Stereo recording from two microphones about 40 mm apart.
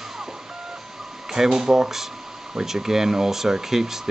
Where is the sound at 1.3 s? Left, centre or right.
Centre.